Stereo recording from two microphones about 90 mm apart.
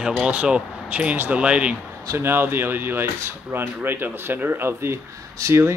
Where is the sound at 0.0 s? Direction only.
10° right (ahead or behind).